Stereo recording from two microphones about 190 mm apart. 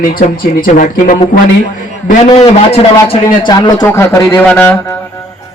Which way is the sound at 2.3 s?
30° left (ahead or behind).